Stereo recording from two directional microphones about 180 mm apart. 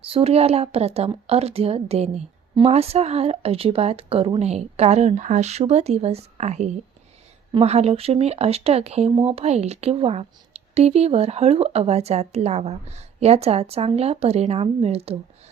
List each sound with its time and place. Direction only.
0.0 s speech: 30° right (ahead or behind)